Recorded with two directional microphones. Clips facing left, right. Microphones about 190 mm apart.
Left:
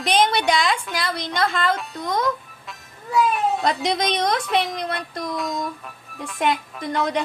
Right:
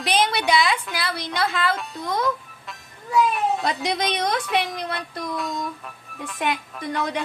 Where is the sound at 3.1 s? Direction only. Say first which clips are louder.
Left 1 dB; centre (ahead or behind).